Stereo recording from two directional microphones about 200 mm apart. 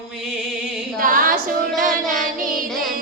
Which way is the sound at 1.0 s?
45° right (ahead or behind).